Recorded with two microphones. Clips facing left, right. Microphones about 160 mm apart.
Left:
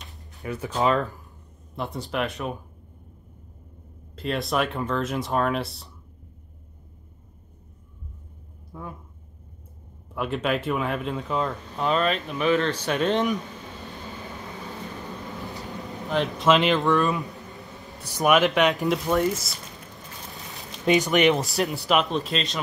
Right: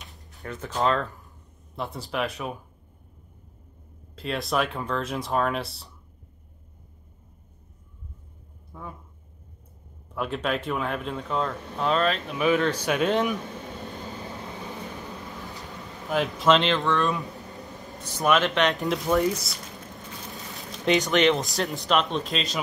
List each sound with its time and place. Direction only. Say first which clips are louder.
0.3 s speech: left 3 dB; 5° left (ahead or behind)
4.1 s speech: left 1 dB; centre (ahead or behind)
8.7 s a sound: left 2 dB; centre (ahead or behind)
10.1 s speech: left 2 dB; centre (ahead or behind)
14.2 s vehicle: right 1 dB; 20° right (ahead or behind)
15.4 s vehicle: left 4 dB; 20° left (ahead or behind)
16.1 s speech: even; centre (ahead or behind)
17.6 s a sound: right 1 dB; 20° right (ahead or behind)
18.0 s speech: left 3 dB; 15° left (ahead or behind)
20.5 s a sound: left 2 dB; 5° left (ahead or behind)
21.8 s speech: even; 5° left (ahead or behind)